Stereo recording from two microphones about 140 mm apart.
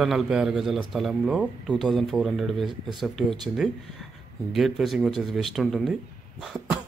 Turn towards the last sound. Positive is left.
turn(degrees=0)  # may be behind; listen again after turning